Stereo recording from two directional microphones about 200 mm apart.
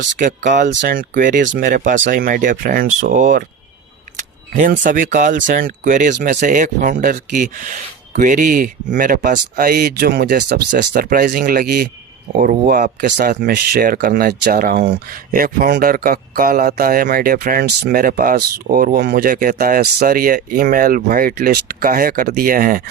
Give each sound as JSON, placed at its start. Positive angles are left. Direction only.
{"t": 0.2, "sound": "speech", "side_deg": -40}
{"t": 4.6, "sound": "speech", "side_deg": -40}